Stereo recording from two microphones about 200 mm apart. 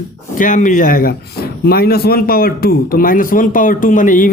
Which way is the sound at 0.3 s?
40° left (ahead or behind).